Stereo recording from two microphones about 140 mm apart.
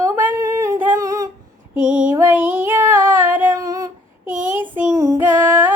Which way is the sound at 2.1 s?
15° right (ahead or behind).